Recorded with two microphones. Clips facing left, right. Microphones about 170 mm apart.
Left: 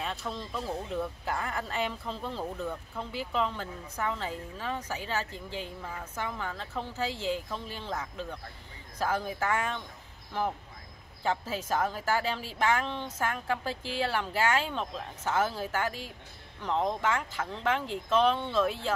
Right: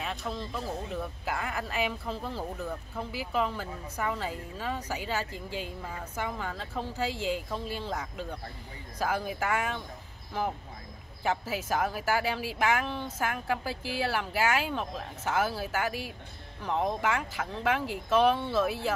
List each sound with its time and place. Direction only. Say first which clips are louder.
0.0 s speech: right 1 dB; centre (ahead or behind)
11.2 s speech: right 1 dB; 10° right (ahead or behind)